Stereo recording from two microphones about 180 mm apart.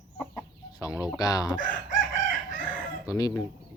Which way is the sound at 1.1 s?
20° left (ahead or behind).